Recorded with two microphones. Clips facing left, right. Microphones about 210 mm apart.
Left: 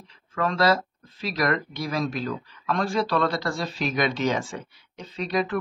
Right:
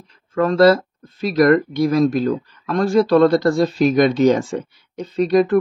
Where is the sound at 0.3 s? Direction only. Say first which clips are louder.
Right 9 dB; 45° right (ahead or behind).